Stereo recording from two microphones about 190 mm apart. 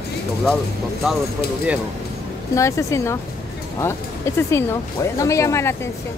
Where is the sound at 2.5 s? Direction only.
15° left (ahead or behind).